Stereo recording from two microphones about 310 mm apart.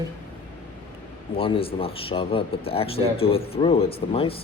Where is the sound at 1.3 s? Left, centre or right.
Centre.